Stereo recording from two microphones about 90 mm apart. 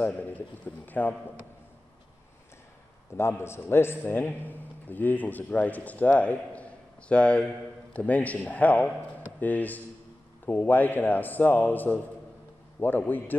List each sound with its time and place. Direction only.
0.0 s a man's voice: 15° left (ahead or behind)
3.2 s a man's voice: 30° left (ahead or behind)